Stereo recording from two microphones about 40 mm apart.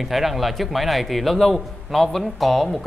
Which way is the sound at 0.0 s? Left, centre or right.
Centre.